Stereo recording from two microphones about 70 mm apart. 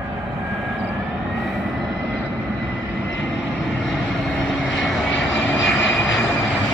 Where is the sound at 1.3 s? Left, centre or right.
Centre.